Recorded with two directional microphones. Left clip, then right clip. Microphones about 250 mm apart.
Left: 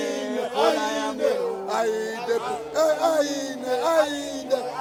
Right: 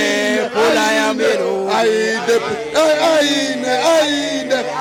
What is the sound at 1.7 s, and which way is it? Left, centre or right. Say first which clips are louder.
Music: right 10 dB; right.